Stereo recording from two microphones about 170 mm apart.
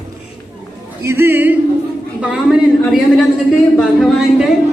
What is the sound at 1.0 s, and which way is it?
Speech, 15° right (ahead or behind).